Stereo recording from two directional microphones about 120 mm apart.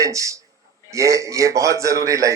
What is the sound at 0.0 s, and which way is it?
A man's voice, 25° right (ahead or behind).